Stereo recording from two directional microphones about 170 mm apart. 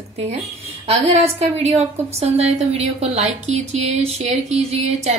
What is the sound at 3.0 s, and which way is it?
Speech, 40° right (ahead or behind).